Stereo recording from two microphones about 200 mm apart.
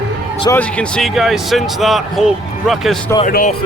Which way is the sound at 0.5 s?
5° left (ahead or behind).